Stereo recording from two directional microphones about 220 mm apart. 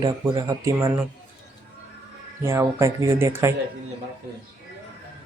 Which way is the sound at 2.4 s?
15° right (ahead or behind).